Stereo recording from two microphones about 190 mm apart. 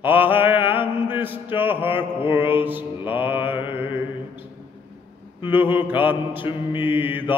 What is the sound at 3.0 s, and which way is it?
Mantra, 25° left (ahead or behind).